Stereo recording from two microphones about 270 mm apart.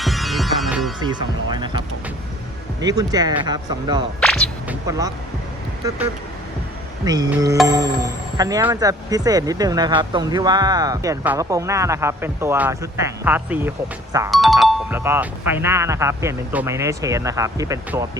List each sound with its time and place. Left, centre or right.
0.0 s music: centre
1.0 s speech: centre
2.8 s speech: centre
4.2 s music: centre
4.9 s speech: centre
7.0 s speech: centre